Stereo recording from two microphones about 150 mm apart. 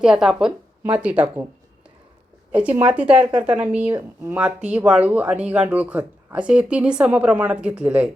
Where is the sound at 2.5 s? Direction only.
10° right (ahead or behind).